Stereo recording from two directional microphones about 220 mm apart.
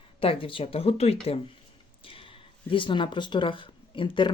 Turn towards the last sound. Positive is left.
turn(degrees=20)  # may be behind; listen again after turning